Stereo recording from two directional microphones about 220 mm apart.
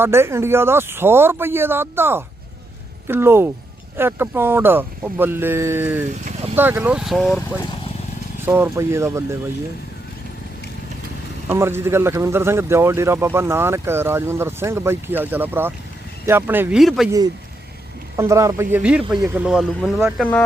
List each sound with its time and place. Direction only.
0.0 s a man's voice: 10° right (ahead or behind)
6.1 s speech: 35° right (ahead or behind)
6.6 s speech: 10° right (ahead or behind)
8.4 s a man's voice: 10° right (ahead or behind)
11.4 s a man's voice: 10° right (ahead or behind)
18.2 s speech: 15° right (ahead or behind)